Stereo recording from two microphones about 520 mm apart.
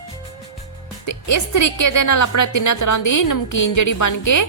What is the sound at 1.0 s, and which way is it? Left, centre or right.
A woman's voice, left.